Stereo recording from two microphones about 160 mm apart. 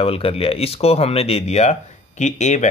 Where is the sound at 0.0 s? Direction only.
35° left (ahead or behind).